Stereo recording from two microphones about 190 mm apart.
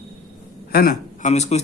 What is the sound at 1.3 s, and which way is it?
Speech, 35° left (ahead or behind).